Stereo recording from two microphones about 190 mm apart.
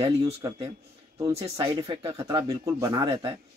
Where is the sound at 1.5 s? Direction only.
20° right (ahead or behind).